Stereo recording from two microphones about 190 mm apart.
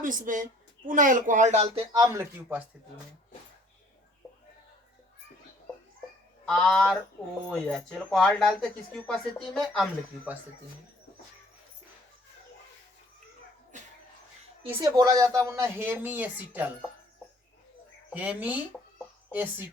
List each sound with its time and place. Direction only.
0.0 s speech: 45° right (ahead or behind)
1.6 s speech: 20° right (ahead or behind)
6.4 s speech: 5° left (ahead or behind)
13.7 s a sound: 40° right (ahead or behind)
14.6 s speech: 30° right (ahead or behind); by 16.6 s 10° right (ahead or behind)
18.1 s speech: 10° right (ahead or behind)